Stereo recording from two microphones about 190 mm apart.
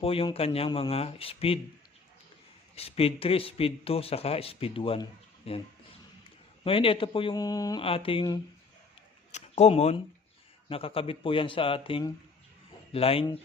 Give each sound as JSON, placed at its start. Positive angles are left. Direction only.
{"t": 0.0, "sound": "a man's voice", "side_deg": 30}
{"t": 2.7, "sound": "a man's voice", "side_deg": 30}
{"t": 6.7, "sound": "speech", "side_deg": 30}
{"t": 9.3, "sound": "a man's voice", "side_deg": 35}